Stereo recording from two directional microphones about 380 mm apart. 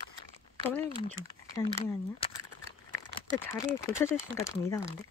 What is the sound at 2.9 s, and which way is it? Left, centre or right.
Speech, centre.